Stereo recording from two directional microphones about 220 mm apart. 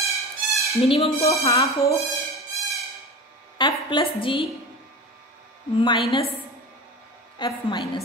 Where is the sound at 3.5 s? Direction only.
20° left (ahead or behind).